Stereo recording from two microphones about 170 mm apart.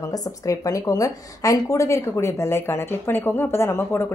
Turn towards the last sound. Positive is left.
turn(degrees=15)  # may be behind; listen again after turning